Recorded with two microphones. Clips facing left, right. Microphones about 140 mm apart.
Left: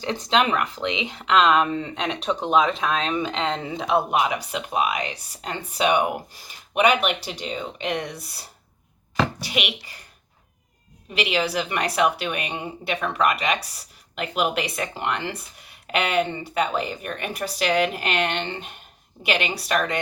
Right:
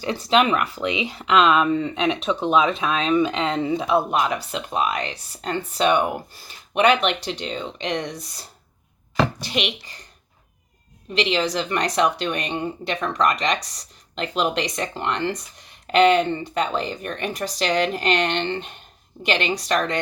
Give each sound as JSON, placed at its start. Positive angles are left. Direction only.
{"t": 0.1, "sound": "speech", "side_deg": -5}
{"t": 3.0, "sound": "speech", "side_deg": 30}
{"t": 3.4, "sound": "speech", "side_deg": -5}
{"t": 4.1, "sound": "a woman's voice", "side_deg": 10}
{"t": 11.1, "sound": "a woman's voice", "side_deg": 10}